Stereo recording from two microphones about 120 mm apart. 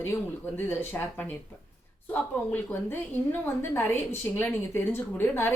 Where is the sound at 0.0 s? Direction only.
20° left (ahead or behind).